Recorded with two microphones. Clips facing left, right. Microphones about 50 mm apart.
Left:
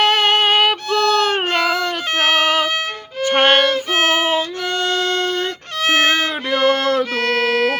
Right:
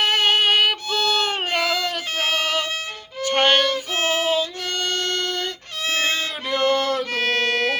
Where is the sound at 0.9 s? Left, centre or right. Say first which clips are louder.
Left 6 dB; left.